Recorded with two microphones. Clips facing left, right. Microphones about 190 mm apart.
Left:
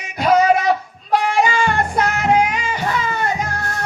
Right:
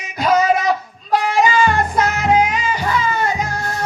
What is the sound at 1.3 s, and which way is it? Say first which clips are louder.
Music: right 2 dB; 60° left (ahead or behind).